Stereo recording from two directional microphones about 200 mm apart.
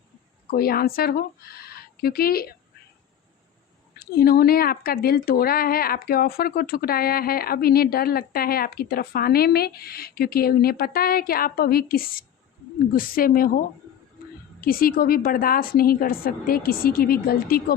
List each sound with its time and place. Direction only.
0.5 s speech: 50° left (ahead or behind)
3.9 s speech: 50° left (ahead or behind)
14.6 s speech: 45° left (ahead or behind)